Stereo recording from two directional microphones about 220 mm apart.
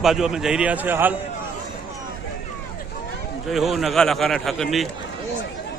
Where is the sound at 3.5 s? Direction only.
Centre (ahead or behind).